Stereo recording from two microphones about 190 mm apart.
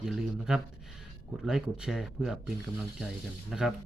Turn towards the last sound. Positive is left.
turn(degrees=0)  # may be behind; listen again after turning